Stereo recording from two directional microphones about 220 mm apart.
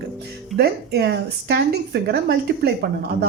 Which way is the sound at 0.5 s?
45° right (ahead or behind).